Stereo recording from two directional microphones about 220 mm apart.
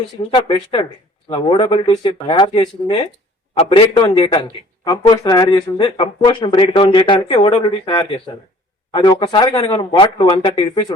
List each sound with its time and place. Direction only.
0.3 s speech: 20° left (ahead or behind)